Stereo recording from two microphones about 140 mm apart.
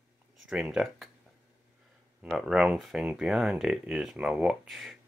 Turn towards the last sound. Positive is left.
turn(degrees=0)  # may be behind; listen again after turning